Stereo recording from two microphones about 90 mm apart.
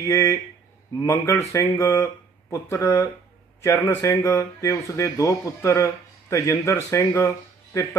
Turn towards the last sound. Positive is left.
turn(degrees=35)  # may be behind; listen again after turning